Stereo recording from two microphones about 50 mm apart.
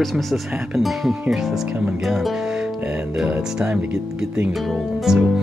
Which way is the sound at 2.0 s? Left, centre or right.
Centre.